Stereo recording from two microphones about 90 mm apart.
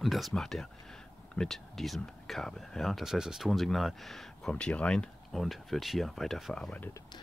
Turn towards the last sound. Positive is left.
turn(degrees=15)  # may be behind; listen again after turning